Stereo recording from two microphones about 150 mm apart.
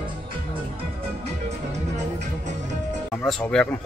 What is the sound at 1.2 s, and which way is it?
Music, 50° right (ahead or behind).